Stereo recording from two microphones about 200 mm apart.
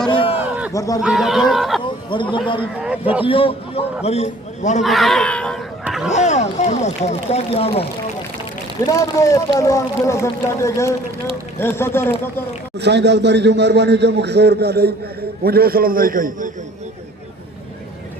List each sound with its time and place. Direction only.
0.3 s a sound: 5° right (ahead or behind)
0.7 s speech: 15° left (ahead or behind)
1.0 s speech: centre (ahead or behind)
1.8 s a man's voice: 25° left (ahead or behind)
2.8 s a man's voice: 5° right (ahead or behind)
3.2 s a man's voice: 25° left (ahead or behind)
4.8 s speech: centre (ahead or behind)
5.8 s a sound: 5° right (ahead or behind)
6.1 s speech: 35° left (ahead or behind)
8.9 s speech: 15° left (ahead or behind)
12.8 s a man's voice: 60° right (ahead or behind)